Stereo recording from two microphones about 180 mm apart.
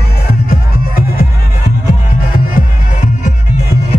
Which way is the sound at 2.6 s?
50° left (ahead or behind).